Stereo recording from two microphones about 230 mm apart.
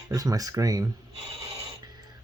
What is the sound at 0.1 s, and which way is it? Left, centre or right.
Speech, centre.